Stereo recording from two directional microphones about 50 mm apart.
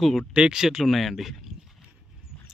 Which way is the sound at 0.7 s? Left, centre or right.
Centre.